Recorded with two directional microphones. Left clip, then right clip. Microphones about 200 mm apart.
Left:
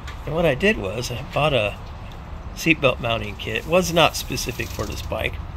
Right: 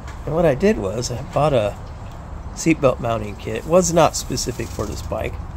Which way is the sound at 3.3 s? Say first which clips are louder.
Left 1 dB; 50° right (ahead or behind).